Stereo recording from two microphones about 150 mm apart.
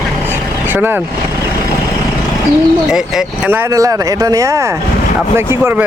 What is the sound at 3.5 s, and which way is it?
Speech, 20° right (ahead or behind).